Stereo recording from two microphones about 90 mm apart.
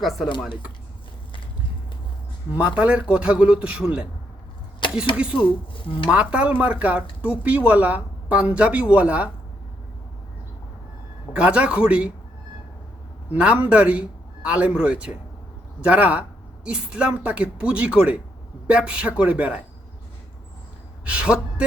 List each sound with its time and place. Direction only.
0.0 s speech: centre (ahead or behind)
2.6 s speech: 15° right (ahead or behind)
5.1 s speech: 10° right (ahead or behind)
11.3 s speech: 15° right (ahead or behind)
13.3 s speech: 15° right (ahead or behind)
21.0 s speech: 15° right (ahead or behind)